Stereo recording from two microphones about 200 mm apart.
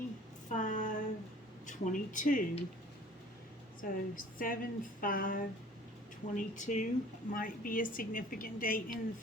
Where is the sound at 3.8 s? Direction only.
45° left (ahead or behind).